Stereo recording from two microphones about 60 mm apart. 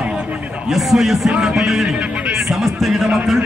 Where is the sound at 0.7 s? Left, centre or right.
Centre.